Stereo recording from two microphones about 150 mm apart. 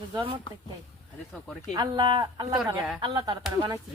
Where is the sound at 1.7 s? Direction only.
30° right (ahead or behind).